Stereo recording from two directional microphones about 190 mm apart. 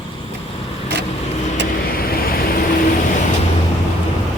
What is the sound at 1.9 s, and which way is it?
Vehicle, 50° left (ahead or behind).